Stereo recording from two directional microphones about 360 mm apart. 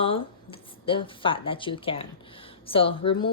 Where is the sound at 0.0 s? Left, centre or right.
Centre.